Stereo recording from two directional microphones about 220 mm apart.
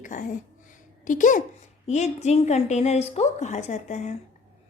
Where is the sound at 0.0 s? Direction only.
35° left (ahead or behind).